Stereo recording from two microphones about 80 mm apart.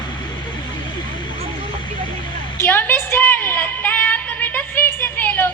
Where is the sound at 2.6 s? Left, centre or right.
Left.